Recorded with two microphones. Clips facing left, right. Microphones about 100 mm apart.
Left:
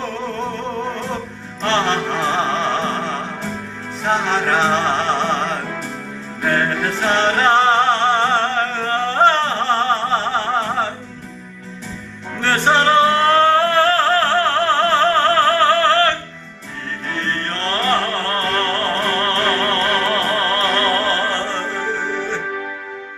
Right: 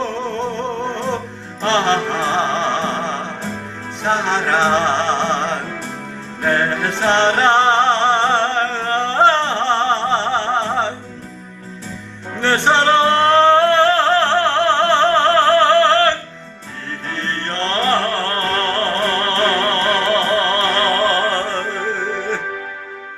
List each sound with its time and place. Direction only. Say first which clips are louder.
1.6 s music: right 2 dB; 30° right (ahead or behind)
12.4 s music: right 1 dB; 25° right (ahead or behind)
17.2 s music: right 1 dB; 30° right (ahead or behind)